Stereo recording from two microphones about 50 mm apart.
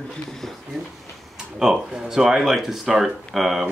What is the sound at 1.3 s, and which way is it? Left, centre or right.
Speech, centre.